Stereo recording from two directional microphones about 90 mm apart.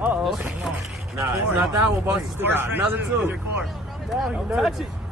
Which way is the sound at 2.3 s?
25° right (ahead or behind).